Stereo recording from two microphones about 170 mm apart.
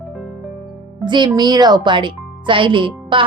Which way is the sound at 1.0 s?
25° right (ahead or behind).